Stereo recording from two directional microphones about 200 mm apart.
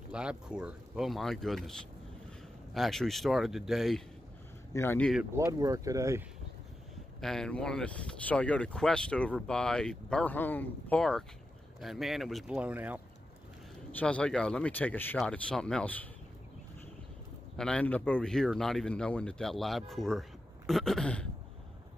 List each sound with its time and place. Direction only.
0.1 s speech: 5° right (ahead or behind)
5.3 s speech: 15° right (ahead or behind)
7.2 s speech: centre (ahead or behind)
13.9 s speech: 5° left (ahead or behind)
17.6 s speech: 5° left (ahead or behind)